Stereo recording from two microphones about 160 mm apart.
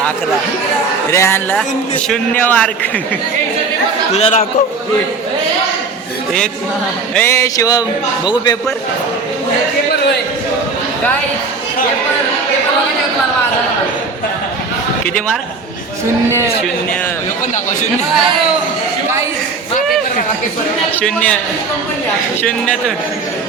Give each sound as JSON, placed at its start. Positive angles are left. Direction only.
{"t": 1.1, "sound": "a man's voice", "side_deg": 15}
{"t": 4.1, "sound": "speech", "side_deg": 45}
{"t": 7.1, "sound": "a man's voice", "side_deg": 10}
{"t": 17.5, "sound": "speech", "side_deg": 50}
{"t": 20.9, "sound": "a man's voice", "side_deg": 5}